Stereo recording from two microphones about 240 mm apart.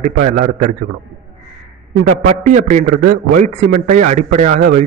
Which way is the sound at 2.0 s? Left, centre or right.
Right.